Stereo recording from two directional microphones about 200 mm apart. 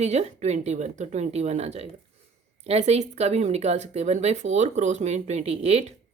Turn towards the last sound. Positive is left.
turn(degrees=-35)  # may be behind; listen again after turning